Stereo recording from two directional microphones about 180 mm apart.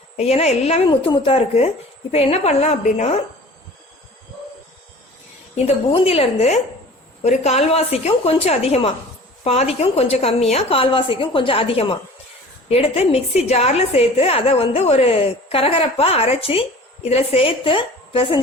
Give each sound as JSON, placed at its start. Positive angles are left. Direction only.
{"t": 0.2, "sound": "a woman's voice", "side_deg": 35}
{"t": 5.6, "sound": "a woman's voice", "side_deg": 30}